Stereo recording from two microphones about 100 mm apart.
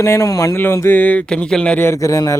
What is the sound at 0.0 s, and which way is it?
Speech, 30° left (ahead or behind).